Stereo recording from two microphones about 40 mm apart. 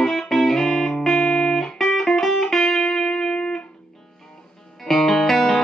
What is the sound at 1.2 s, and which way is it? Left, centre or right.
Music, left.